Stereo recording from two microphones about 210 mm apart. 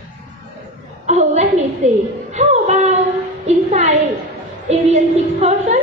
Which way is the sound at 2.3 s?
35° right (ahead or behind).